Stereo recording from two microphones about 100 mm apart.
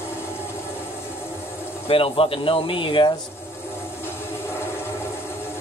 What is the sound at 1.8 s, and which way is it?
Speech, 65° left (ahead or behind).